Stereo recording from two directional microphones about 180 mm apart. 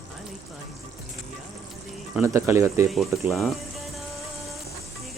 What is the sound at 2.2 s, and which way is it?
Speech, 15° right (ahead or behind).